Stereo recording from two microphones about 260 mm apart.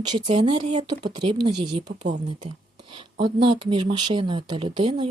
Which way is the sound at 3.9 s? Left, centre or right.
Centre.